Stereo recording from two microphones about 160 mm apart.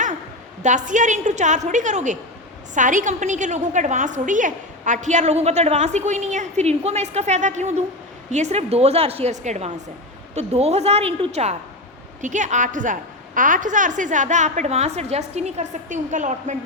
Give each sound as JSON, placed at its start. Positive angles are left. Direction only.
{"t": 0.6, "sound": "a woman's voice", "side_deg": -50}
{"t": 12.2, "sound": "a woman's voice", "side_deg": -50}